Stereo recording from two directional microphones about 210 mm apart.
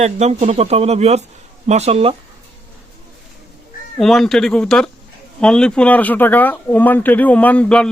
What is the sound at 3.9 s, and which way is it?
Speech, centre (ahead or behind).